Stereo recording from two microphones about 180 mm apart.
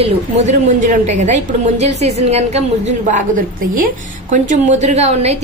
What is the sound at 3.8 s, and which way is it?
A woman's voice, 45° right (ahead or behind).